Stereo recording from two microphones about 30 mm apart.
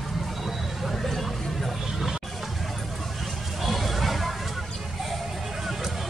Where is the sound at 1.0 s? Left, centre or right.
Centre.